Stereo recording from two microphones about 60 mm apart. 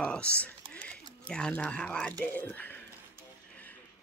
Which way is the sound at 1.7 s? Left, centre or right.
Centre.